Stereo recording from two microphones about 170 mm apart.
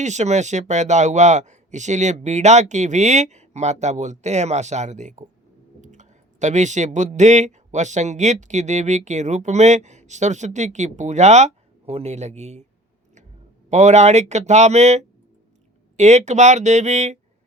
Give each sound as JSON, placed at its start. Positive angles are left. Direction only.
{"t": 0.0, "sound": "speech", "side_deg": -45}
{"t": 13.7, "sound": "speech", "side_deg": -40}